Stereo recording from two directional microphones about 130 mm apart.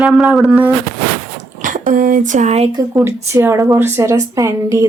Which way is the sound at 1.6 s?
90° right.